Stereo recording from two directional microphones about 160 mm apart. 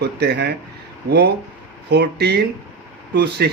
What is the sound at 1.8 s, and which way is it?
Speech, 90° right.